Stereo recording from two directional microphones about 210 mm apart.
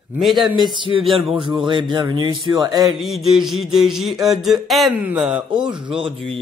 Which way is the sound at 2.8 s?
Centre (ahead or behind).